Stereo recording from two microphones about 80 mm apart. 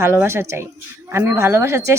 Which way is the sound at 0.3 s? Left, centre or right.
Right.